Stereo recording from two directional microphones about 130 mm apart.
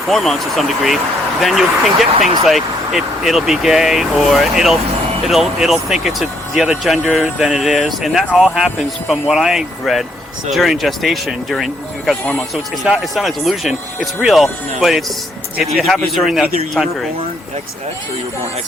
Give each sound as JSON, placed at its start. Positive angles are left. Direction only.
{"t": 0.1, "sound": "speech", "side_deg": 0}
{"t": 12.2, "sound": "speech", "side_deg": 10}
{"t": 12.8, "sound": "speech", "side_deg": -5}